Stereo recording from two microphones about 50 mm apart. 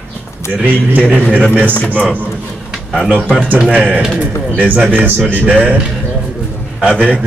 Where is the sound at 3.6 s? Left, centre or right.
Right.